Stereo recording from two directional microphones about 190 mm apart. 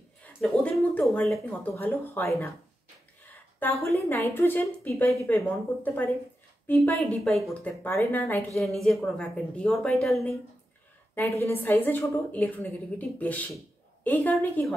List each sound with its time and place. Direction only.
0.2 s speech: 5° left (ahead or behind)
3.5 s a woman's voice: 10° left (ahead or behind)
11.1 s a woman's voice: 15° left (ahead or behind)